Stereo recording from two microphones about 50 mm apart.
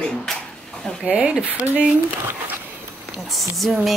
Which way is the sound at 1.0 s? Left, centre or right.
Right.